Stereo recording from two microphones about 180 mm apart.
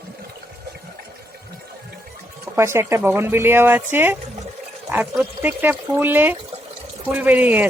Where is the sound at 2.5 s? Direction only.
15° right (ahead or behind).